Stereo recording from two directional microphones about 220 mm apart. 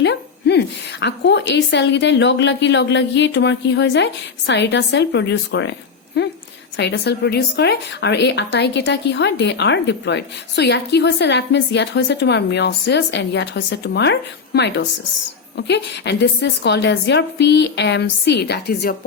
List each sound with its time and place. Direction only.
0.0 s speech: 50° left (ahead or behind)